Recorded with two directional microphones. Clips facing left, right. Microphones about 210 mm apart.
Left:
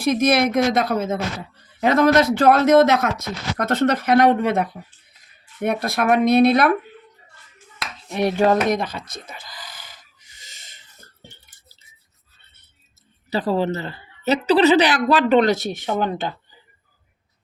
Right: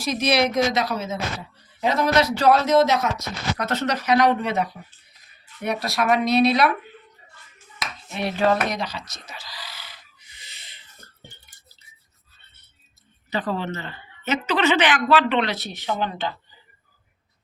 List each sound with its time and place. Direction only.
0.0 s speech: 50° left (ahead or behind)
8.1 s speech: 45° left (ahead or behind)
8.7 s gasp: 50° left (ahead or behind)
13.3 s a woman's voice: 35° left (ahead or behind)